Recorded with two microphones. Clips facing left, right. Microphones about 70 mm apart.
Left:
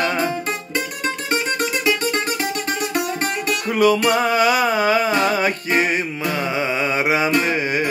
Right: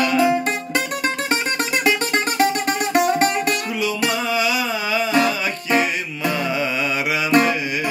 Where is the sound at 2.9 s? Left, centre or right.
Right.